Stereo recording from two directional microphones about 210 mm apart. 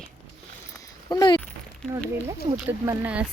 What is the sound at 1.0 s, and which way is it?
Speech, 20° left (ahead or behind).